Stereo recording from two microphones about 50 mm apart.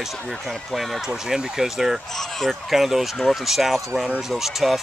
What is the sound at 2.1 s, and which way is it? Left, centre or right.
Speech, centre.